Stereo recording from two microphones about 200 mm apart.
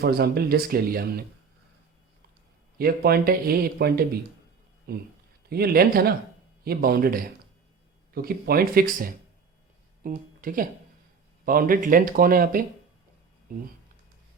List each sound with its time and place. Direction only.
0.0 s speech: 50° right (ahead or behind)
2.7 s speech: 50° right (ahead or behind)